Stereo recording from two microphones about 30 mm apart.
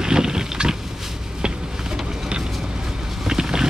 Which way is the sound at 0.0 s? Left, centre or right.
Right.